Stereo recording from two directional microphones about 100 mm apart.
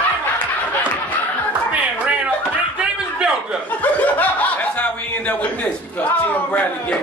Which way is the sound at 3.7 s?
15° left (ahead or behind).